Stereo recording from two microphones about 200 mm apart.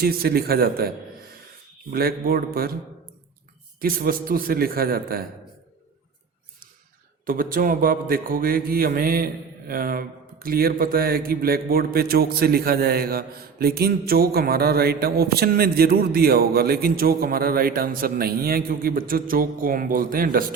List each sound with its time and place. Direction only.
0.0 s mantra: 50° right (ahead or behind)
3.8 s mantra: 45° right (ahead or behind)
7.3 s mantra: 45° right (ahead or behind)